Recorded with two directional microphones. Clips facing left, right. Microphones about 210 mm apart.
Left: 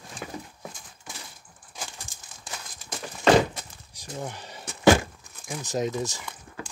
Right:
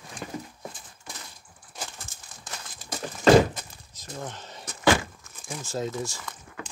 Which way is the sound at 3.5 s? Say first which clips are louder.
Even; 10° left (ahead or behind).